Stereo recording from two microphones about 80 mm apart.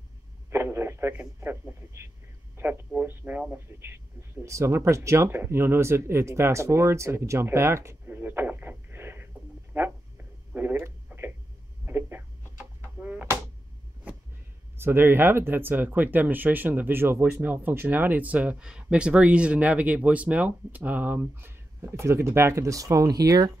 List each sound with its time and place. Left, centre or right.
0.5 s radio: right
1.4 s speech: right
2.5 s a sound: right
2.9 s speech: right
10.5 s telephone: right
11.8 s a sound: right
14.8 s speech: right